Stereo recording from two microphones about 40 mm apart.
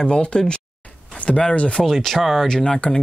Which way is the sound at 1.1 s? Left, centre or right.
Left.